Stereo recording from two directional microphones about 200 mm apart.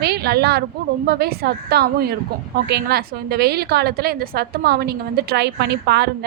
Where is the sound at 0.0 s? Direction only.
55° right (ahead or behind).